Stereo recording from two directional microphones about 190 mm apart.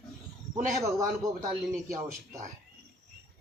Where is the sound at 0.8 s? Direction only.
15° right (ahead or behind).